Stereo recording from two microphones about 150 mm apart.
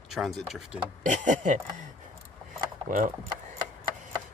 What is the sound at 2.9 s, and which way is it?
Speech, 60° right (ahead or behind).